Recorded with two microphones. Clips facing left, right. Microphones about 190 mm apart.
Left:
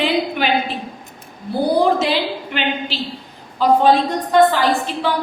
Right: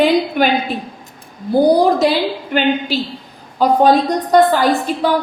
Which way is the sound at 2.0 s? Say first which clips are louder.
Right 4 dB; 45° right (ahead or behind).